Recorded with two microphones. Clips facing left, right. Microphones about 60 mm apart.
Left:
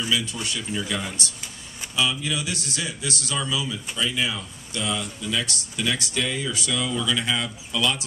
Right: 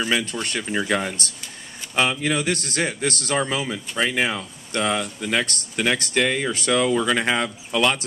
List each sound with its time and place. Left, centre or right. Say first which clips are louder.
0.0 s a man's voice: right 3 dB; right